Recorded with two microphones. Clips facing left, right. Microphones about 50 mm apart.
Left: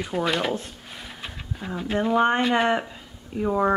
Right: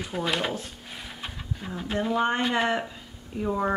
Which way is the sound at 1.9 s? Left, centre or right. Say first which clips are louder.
Left 4 dB; centre.